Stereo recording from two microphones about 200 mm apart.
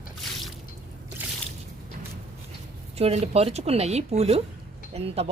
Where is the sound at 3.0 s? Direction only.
30° right (ahead or behind).